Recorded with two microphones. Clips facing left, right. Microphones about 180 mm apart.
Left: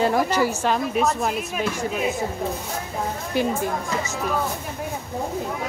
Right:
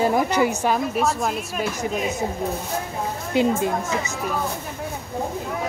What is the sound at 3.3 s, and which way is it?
Speech, 20° right (ahead or behind).